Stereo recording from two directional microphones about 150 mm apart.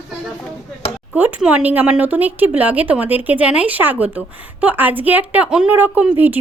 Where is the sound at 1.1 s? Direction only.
10° right (ahead or behind).